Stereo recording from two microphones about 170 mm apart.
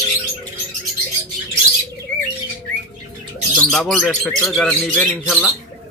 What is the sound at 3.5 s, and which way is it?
Speech, 5° left (ahead or behind).